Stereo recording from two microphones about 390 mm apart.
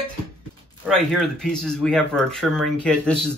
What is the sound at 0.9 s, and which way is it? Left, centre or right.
Speech, centre.